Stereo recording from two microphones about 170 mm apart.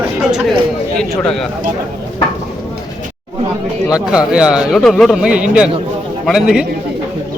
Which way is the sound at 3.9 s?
5° right (ahead or behind).